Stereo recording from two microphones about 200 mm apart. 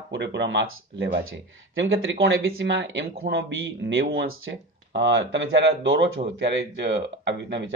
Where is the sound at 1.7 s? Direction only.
75° right (ahead or behind).